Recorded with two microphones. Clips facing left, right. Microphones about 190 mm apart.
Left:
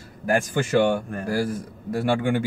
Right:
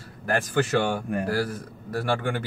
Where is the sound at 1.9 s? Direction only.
15° left (ahead or behind).